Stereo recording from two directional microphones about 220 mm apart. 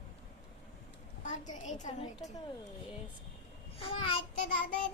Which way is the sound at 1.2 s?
35° left (ahead or behind).